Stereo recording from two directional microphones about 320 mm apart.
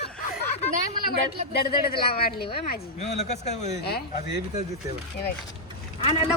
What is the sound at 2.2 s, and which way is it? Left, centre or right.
Speech, left.